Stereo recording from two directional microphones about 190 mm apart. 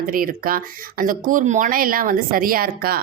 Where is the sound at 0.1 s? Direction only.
50° right (ahead or behind).